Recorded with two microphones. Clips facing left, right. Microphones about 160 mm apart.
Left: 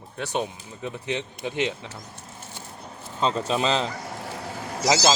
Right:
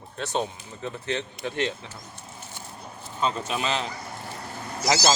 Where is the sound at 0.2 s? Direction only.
15° left (ahead or behind).